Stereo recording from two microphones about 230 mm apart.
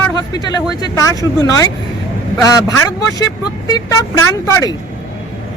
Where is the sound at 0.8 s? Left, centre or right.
Centre.